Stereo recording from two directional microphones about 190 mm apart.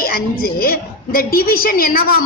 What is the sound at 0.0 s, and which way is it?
A woman's voice, 50° left (ahead or behind).